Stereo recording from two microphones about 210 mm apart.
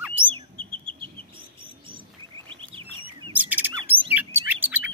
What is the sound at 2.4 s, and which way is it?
Bird, 25° right (ahead or behind).